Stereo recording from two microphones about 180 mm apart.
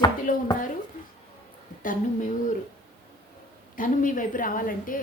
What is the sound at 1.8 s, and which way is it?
Speech, 50° left (ahead or behind).